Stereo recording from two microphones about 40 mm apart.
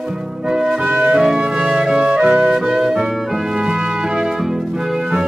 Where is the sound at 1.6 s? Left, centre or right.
Centre.